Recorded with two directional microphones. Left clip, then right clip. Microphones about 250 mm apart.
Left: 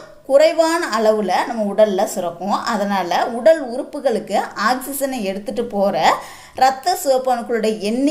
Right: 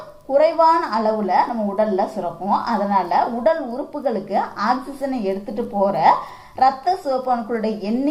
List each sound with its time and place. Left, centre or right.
0.3 s a woman's voice: left